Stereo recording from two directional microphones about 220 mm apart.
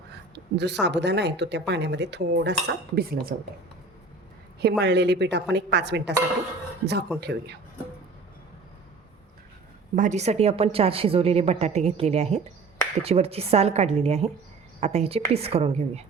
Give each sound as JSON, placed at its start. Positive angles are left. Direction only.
{"t": 0.1, "sound": "speech", "side_deg": -50}
{"t": 4.8, "sound": "speech", "side_deg": -50}
{"t": 7.2, "sound": "speech", "side_deg": -50}
{"t": 9.9, "sound": "a woman's voice", "side_deg": -35}